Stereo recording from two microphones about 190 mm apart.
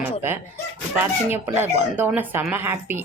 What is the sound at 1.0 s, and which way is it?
Speech, 10° right (ahead or behind).